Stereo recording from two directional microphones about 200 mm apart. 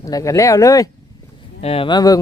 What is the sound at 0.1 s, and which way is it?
Speech, 15° left (ahead or behind).